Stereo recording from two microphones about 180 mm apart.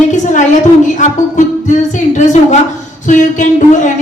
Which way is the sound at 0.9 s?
40° left (ahead or behind).